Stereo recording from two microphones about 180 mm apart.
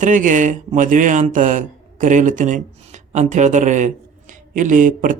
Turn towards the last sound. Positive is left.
turn(degrees=-45)  # may be behind; listen again after turning